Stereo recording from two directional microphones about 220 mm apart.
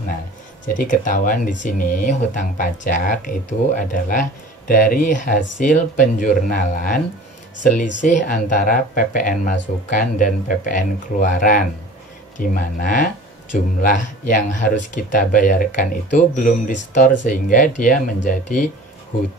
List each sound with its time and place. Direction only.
0.7 s speech: 35° left (ahead or behind)